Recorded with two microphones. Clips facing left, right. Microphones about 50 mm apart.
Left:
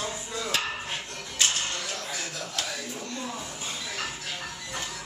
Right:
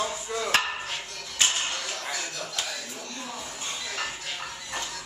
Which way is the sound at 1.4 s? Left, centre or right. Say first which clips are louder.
Right 1 dB; right.